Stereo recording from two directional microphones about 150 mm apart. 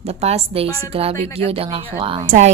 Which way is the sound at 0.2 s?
40° right (ahead or behind).